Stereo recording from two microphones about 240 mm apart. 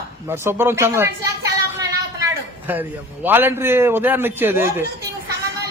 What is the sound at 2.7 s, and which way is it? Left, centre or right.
A man's voice, centre.